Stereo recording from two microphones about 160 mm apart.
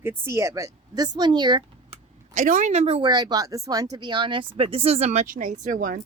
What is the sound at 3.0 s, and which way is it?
A woman's voice, 25° right (ahead or behind).